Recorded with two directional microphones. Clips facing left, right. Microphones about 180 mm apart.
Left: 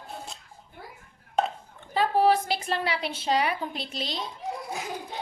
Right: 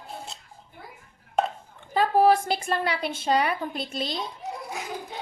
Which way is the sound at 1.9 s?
50° right (ahead or behind).